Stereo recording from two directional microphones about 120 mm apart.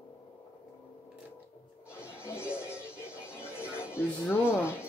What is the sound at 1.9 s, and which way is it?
Music, 20° left (ahead or behind).